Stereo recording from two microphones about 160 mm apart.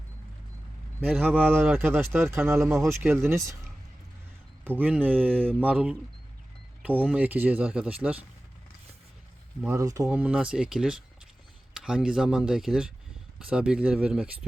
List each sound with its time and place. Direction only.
1.4 s speech: 10° right (ahead or behind)
4.6 s speech: 10° right (ahead or behind)
5.3 s mantra: 5° left (ahead or behind)
5.5 s speech: 10° right (ahead or behind)
9.6 s speech: 20° right (ahead or behind)
10.1 s speech: 10° right (ahead or behind)